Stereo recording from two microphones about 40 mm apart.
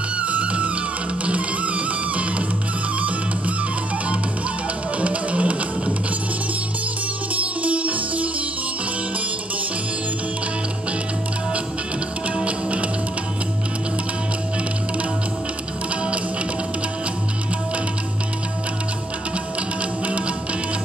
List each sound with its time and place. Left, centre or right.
0.2 s music: right
5.0 s music: right
7.3 s music: right
12.4 s music: right
20.1 s music: right